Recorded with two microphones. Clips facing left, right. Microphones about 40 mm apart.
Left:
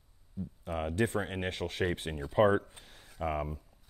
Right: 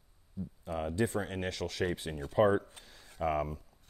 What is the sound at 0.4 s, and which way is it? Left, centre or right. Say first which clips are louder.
Speech: left 1 dB; left.